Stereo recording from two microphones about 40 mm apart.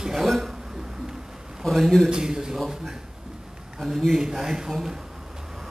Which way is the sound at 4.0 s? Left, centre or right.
Centre.